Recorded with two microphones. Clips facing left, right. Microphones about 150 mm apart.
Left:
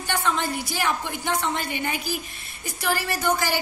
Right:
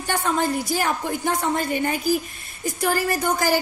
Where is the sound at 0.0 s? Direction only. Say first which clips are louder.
Right 3 dB; 40° right (ahead or behind).